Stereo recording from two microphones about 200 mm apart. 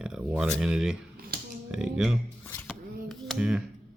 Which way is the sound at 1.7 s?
5° right (ahead or behind).